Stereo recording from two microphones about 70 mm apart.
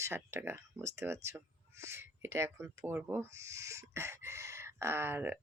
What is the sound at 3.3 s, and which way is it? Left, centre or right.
Chicken, right.